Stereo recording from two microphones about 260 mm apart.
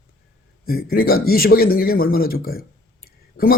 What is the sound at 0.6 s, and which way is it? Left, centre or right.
A man's voice, left.